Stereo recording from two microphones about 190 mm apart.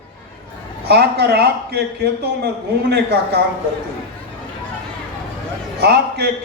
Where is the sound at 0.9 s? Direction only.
60° right (ahead or behind).